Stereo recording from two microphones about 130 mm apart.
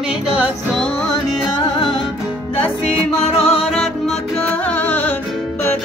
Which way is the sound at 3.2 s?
50° left (ahead or behind).